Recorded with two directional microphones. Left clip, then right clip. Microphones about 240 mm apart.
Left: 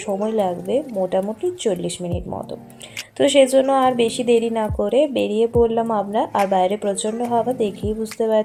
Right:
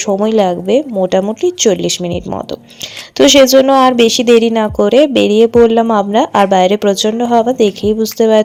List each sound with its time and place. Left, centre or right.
0.0 s speech: right